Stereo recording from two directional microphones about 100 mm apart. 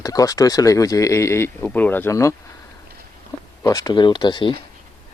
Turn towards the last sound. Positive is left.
turn(degrees=50)  # may be behind; listen again after turning